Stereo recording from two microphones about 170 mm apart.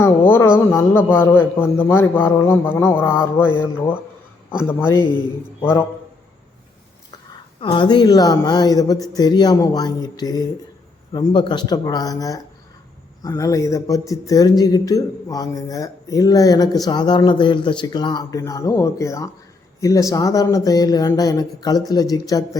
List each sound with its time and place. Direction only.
0.0 s a man's voice: 15° left (ahead or behind)
7.6 s speech: 30° left (ahead or behind)